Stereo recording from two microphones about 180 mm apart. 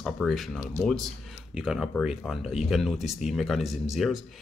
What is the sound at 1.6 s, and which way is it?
Speech, 5° right (ahead or behind).